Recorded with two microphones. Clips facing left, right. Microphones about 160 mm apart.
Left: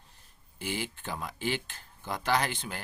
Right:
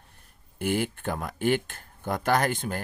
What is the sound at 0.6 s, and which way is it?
Speech, 55° right (ahead or behind).